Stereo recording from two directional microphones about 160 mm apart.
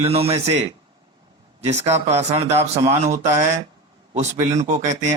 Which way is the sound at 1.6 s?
45° right (ahead or behind).